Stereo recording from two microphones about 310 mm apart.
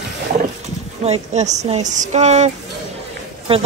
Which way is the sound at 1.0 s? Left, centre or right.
Right.